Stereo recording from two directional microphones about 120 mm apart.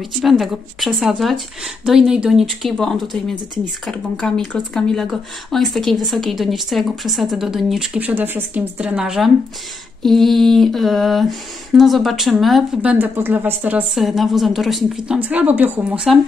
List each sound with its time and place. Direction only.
0.0 s speech: centre (ahead or behind)
8.0 s a woman's voice: 15° right (ahead or behind)
12.8 s a woman's voice: 15° right (ahead or behind)
13.9 s speech: centre (ahead or behind)